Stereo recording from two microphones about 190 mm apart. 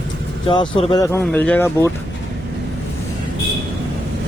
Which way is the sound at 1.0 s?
10° left (ahead or behind).